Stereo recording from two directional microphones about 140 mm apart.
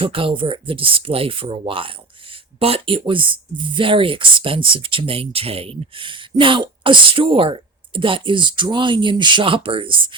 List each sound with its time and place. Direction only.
0.0 s speech: 40° right (ahead or behind)